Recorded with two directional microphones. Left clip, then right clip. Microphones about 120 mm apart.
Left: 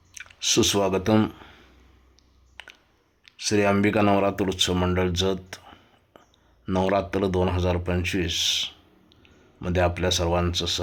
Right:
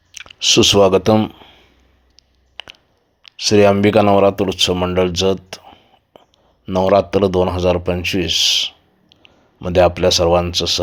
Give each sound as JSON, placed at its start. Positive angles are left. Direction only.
{"t": 0.1, "sound": "speech", "side_deg": -35}
{"t": 1.1, "sound": "a sound", "side_deg": -15}
{"t": 2.1, "sound": "a sound", "side_deg": -40}
{"t": 3.2, "sound": "speech", "side_deg": -40}
{"t": 4.7, "sound": "speech", "side_deg": -10}
{"t": 4.9, "sound": "speech", "side_deg": -30}
{"t": 5.6, "sound": "whispering", "side_deg": -5}
{"t": 6.7, "sound": "speech", "side_deg": -35}
{"t": 8.0, "sound": "a sound", "side_deg": -30}
{"t": 9.6, "sound": "speech", "side_deg": -35}